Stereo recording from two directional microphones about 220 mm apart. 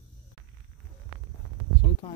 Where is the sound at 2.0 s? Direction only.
25° left (ahead or behind).